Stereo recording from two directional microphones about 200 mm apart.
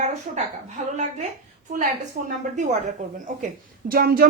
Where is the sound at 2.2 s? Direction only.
45° right (ahead or behind).